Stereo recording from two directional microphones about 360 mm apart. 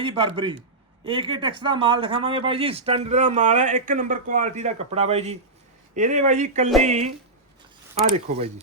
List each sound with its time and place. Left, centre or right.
0.0 s speech: centre